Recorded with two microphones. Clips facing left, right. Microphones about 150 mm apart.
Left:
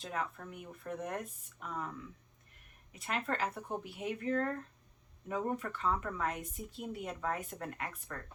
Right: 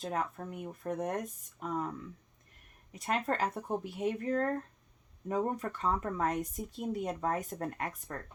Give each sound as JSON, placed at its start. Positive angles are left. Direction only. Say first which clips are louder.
{"t": 0.0, "sound": "speech", "louder": "right 4 dB", "side_deg": -40}
{"t": 2.9, "sound": "speech", "louder": "right 4 dB", "side_deg": -40}